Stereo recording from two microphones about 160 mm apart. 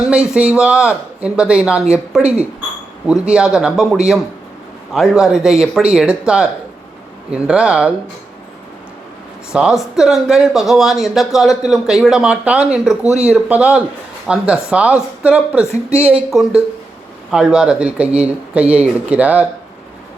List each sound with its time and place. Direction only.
0.1 s speech: 5° right (ahead or behind)
9.5 s speech: 5° right (ahead or behind)
15.6 s speech: 15° left (ahead or behind)
16.0 s speech: 5° right (ahead or behind)